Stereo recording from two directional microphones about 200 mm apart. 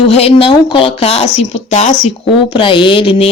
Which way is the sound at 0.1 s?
30° left (ahead or behind).